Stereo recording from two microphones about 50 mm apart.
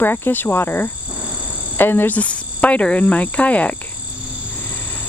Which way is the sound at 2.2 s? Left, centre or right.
Left.